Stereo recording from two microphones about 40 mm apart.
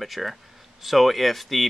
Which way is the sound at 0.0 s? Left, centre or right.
Centre.